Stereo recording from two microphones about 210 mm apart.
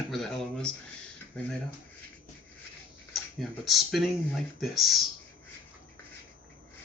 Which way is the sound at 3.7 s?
Centre (ahead or behind).